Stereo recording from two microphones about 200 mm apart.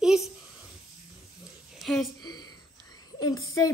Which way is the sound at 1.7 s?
Centre (ahead or behind).